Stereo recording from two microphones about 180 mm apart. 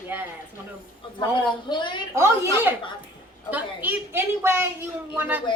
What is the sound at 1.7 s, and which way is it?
Speech, 25° left (ahead or behind).